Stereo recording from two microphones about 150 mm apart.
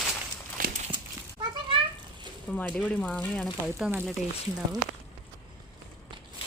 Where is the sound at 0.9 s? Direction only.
30° right (ahead or behind).